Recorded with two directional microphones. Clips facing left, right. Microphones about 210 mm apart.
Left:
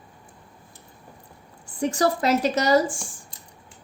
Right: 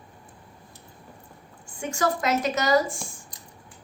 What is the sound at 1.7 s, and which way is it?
A woman's voice, 35° left (ahead or behind).